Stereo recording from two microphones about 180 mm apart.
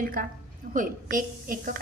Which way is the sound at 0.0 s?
50° right (ahead or behind).